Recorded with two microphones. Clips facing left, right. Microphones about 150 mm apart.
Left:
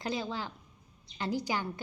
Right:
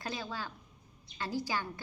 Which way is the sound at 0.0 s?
20° left (ahead or behind).